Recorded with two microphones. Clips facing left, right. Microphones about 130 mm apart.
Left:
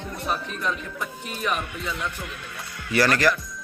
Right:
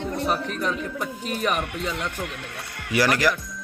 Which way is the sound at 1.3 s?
65° right (ahead or behind).